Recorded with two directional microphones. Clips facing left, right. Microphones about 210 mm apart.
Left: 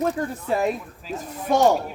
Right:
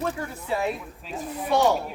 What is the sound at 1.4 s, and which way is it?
Speech, 45° left (ahead or behind).